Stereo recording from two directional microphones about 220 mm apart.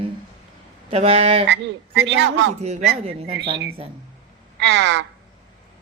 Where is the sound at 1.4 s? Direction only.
55° right (ahead or behind).